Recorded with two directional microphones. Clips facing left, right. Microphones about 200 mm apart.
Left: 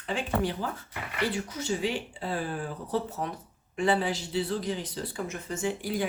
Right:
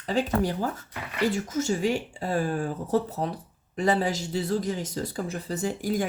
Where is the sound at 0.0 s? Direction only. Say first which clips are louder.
Right 4 dB; 40° right (ahead or behind).